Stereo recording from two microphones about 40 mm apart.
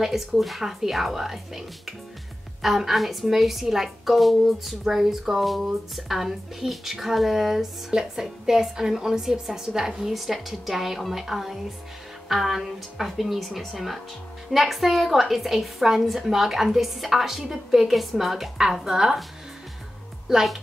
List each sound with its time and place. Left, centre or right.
0.0 s a woman's voice: centre
20.3 s speech: centre